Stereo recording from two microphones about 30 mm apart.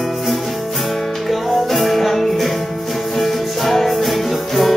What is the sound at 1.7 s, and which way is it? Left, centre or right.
Music, centre.